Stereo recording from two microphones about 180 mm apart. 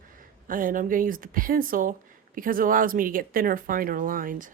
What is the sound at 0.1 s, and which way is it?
Speech, 50° right (ahead or behind).